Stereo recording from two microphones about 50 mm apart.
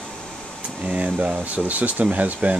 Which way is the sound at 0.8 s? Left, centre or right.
Right.